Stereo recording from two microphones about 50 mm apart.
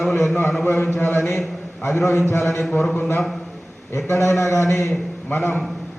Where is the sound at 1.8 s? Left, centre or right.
Left.